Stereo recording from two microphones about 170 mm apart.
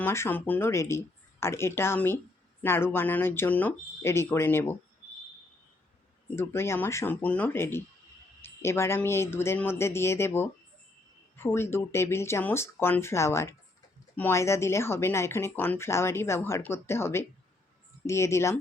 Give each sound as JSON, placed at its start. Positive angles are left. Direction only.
{"t": 0.0, "sound": "speech", "side_deg": 15}
{"t": 6.3, "sound": "speech", "side_deg": 15}